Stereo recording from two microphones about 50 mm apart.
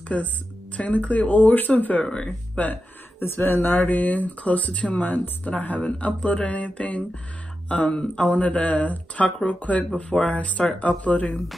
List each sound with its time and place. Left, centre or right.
0.1 s speech: left